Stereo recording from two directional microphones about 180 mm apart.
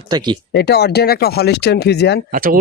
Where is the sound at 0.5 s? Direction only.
65° left (ahead or behind).